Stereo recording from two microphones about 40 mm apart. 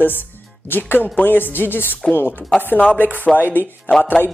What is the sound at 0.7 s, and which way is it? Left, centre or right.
Speech, left.